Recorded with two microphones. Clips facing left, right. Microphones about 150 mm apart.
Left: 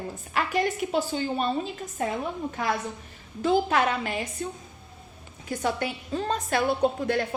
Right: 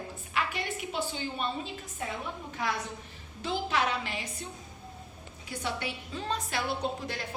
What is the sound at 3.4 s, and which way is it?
Speech, 50° left (ahead or behind).